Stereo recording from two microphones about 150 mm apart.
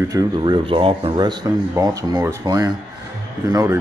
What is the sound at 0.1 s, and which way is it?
Speech, 25° right (ahead or behind).